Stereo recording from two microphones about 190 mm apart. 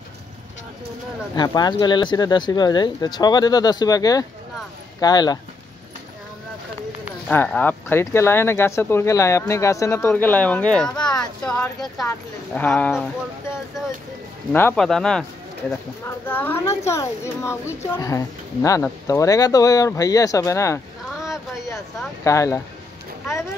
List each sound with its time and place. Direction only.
1.3 s speech: 20° left (ahead or behind)
7.2 s speech: 5° left (ahead or behind)
14.5 s speech: 10° left (ahead or behind)
16.3 s speech: 10° left (ahead or behind)
21.1 s boat: centre (ahead or behind)
22.2 s speech: 15° left (ahead or behind)